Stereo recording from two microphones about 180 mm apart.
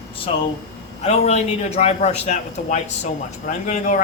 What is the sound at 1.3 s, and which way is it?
A man's voice, 40° left (ahead or behind).